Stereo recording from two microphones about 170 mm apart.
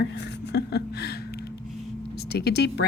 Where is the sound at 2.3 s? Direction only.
70° left (ahead or behind).